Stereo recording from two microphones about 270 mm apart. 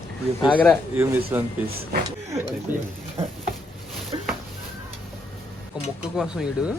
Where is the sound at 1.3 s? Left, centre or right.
Centre.